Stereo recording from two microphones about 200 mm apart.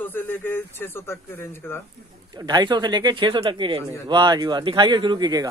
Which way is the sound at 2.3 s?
20° right (ahead or behind).